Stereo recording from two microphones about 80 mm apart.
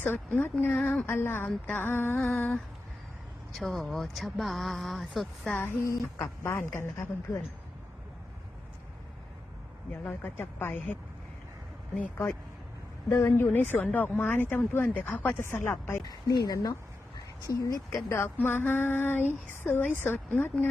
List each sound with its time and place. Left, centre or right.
0.0 s female singing: left
0.7 s speech: centre
1.0 s female singing: left
3.6 s speech: centre
5.5 s female singing: left
6.4 s speech: left
9.9 s female singing: left
12.1 s female singing: left
13.1 s speech: left
13.3 s female singing: left
16.0 s a woman's voice: left
18.1 s female singing: left